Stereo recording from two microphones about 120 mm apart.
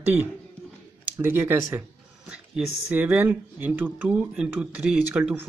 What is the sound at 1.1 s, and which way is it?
Speech, 20° right (ahead or behind).